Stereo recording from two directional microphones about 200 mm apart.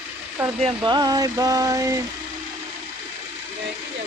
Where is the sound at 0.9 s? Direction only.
20° right (ahead or behind).